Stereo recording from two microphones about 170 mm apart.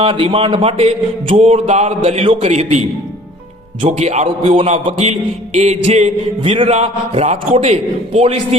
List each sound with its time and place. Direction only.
0.0 s speech: 30° right (ahead or behind)